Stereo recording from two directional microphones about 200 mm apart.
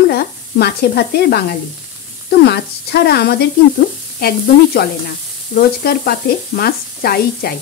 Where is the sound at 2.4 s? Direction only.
55° left (ahead or behind).